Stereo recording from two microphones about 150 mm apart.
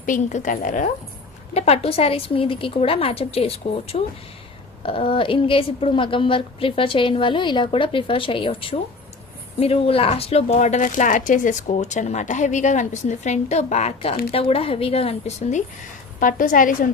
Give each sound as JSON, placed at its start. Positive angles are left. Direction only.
{"t": 0.0, "sound": "a woman's voice", "side_deg": 60}
{"t": 1.5, "sound": "a woman's voice", "side_deg": 45}
{"t": 16.2, "sound": "a woman's voice", "side_deg": 65}